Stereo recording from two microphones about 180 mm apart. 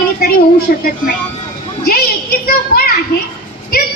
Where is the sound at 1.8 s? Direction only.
55° left (ahead or behind).